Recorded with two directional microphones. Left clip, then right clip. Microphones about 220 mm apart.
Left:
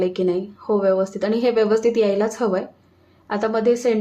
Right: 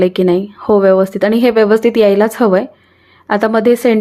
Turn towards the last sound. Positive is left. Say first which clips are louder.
# right 8 dB
turn(degrees=-35)  # may be behind; listen again after turning